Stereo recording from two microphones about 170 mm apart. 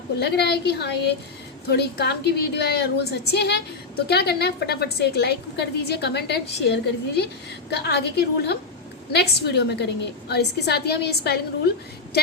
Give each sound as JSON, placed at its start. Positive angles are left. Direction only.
{"t": 0.2, "sound": "a woman's voice", "side_deg": 75}